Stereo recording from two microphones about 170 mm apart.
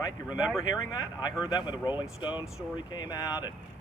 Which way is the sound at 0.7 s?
20° left (ahead or behind).